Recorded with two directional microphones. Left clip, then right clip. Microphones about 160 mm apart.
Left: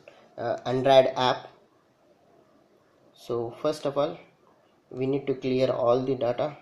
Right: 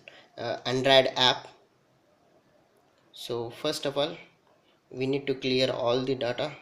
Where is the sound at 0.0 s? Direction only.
5° left (ahead or behind).